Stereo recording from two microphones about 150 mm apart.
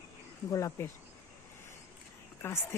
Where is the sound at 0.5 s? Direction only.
20° left (ahead or behind).